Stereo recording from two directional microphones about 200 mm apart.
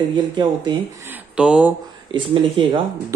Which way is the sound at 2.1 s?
25° right (ahead or behind).